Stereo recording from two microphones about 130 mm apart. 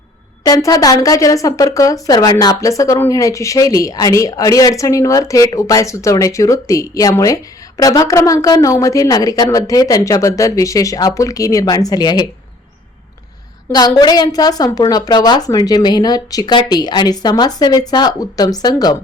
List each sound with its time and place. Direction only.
0.4 s a woman's voice: 25° left (ahead or behind)
13.7 s a woman's voice: 30° left (ahead or behind)